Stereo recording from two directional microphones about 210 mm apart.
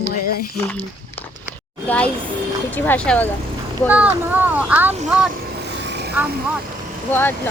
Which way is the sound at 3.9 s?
10° right (ahead or behind).